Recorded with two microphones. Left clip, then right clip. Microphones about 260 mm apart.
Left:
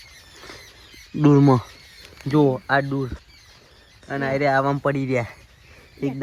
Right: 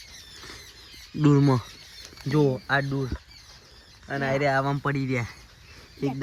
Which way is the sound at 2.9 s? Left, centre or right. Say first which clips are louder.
Left 4 dB; left.